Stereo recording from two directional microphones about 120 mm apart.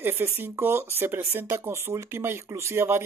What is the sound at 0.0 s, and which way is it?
Speech, 20° right (ahead or behind).